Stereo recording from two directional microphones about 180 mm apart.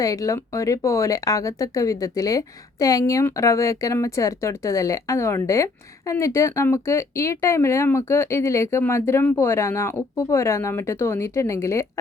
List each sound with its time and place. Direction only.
0.0 s speech: 20° left (ahead or behind)